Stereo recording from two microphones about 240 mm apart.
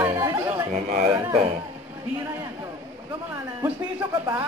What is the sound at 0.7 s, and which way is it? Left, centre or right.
Speech, right.